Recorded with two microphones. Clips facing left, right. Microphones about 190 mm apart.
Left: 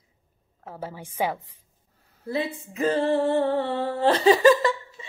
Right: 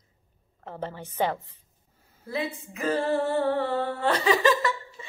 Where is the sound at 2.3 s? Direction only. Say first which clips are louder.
Left 3 dB; 30° left (ahead or behind).